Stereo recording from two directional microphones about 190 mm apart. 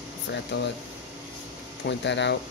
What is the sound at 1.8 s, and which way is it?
Speech, 65° left (ahead or behind).